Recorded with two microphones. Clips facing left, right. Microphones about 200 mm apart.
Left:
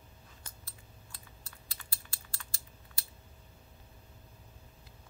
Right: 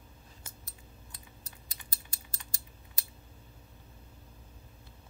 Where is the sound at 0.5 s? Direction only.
20° right (ahead or behind).